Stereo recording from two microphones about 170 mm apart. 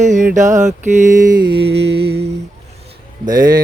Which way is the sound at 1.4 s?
30° right (ahead or behind).